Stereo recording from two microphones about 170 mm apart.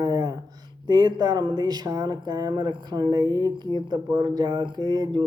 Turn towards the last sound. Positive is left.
turn(degrees=-25)  # may be behind; listen again after turning